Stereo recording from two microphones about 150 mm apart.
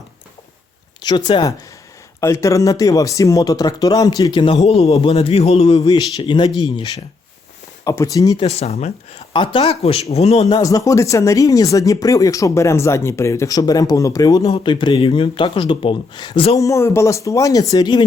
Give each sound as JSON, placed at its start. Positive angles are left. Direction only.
{"t": 1.0, "sound": "speech", "side_deg": 30}
{"t": 2.2, "sound": "speech", "side_deg": 20}
{"t": 4.6, "sound": "speech", "side_deg": 40}
{"t": 5.9, "sound": "speech", "side_deg": 25}
{"t": 8.4, "sound": "speech", "side_deg": 45}
{"t": 9.3, "sound": "speech", "side_deg": 35}
{"t": 10.5, "sound": "speech", "side_deg": 25}
{"t": 16.6, "sound": "speech", "side_deg": 20}